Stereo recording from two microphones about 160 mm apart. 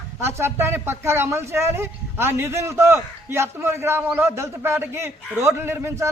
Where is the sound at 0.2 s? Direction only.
15° right (ahead or behind).